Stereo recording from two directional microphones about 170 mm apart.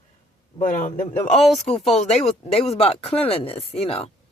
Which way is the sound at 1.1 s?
35° left (ahead or behind).